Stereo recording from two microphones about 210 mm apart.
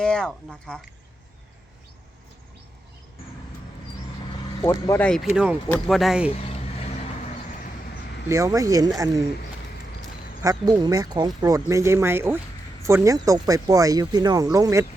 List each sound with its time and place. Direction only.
0.0 s speech: 5° left (ahead or behind)
4.6 s speech: 15° left (ahead or behind); by 6.3 s 5° right (ahead or behind)
6.3 s vehicle: 30° left (ahead or behind)
8.3 s speech: 15° right (ahead or behind)
10.4 s speech: 15° right (ahead or behind)